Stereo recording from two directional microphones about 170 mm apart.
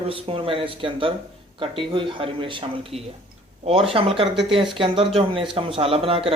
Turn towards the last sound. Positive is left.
turn(degrees=-35)  # may be behind; listen again after turning